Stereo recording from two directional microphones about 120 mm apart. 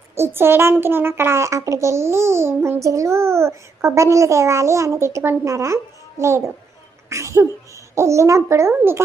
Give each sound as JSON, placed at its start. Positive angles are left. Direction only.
{"t": 0.1, "sound": "a child's voice", "side_deg": -20}
{"t": 7.1, "sound": "a sound", "side_deg": -25}
{"t": 7.9, "sound": "a child's voice", "side_deg": -25}